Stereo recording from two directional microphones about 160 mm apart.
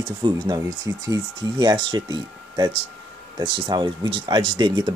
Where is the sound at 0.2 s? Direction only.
25° right (ahead or behind).